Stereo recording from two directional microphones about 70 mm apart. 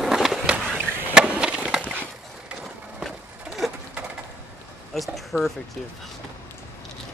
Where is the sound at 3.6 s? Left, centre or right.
Centre.